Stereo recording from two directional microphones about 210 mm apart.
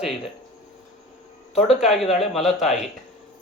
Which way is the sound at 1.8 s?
Centre (ahead or behind).